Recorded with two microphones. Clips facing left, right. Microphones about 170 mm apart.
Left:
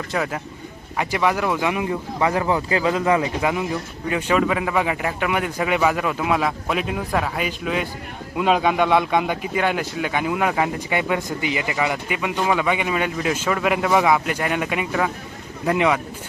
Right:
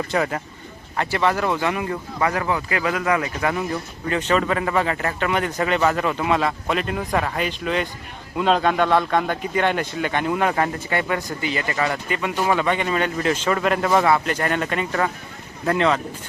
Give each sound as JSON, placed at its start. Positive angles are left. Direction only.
{"t": 0.1, "sound": "speech", "side_deg": 0}
{"t": 2.3, "sound": "speech", "side_deg": 25}
{"t": 3.5, "sound": "speech", "side_deg": 10}